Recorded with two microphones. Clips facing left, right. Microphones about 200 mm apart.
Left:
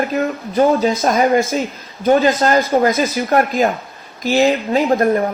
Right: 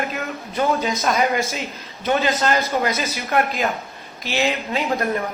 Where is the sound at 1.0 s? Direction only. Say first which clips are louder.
Left 5 dB; 50° left (ahead or behind).